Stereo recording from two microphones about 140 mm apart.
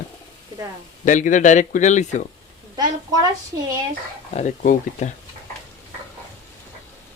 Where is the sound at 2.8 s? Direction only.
30° right (ahead or behind).